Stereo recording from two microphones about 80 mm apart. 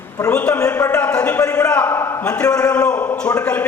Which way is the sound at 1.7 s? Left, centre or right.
Left.